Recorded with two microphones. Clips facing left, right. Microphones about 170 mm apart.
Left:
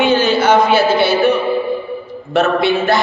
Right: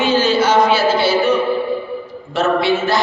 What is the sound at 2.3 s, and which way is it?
Speech, 60° left (ahead or behind).